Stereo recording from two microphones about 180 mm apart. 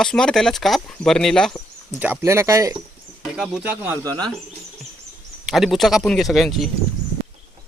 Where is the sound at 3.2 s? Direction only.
5° right (ahead or behind).